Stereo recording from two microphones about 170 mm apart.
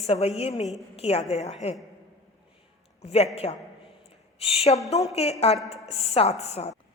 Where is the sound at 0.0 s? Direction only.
35° left (ahead or behind).